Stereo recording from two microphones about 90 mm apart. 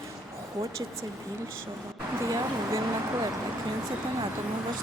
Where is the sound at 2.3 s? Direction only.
40° right (ahead or behind).